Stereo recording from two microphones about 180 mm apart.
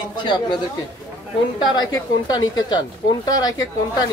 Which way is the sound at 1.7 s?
25° left (ahead or behind).